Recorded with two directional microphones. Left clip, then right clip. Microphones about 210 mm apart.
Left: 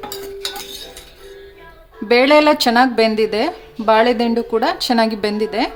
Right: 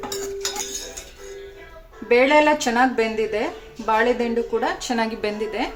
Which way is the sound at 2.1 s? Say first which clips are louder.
Left 4 dB; 45° left (ahead or behind).